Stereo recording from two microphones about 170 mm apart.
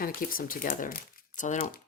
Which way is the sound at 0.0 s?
55° left (ahead or behind).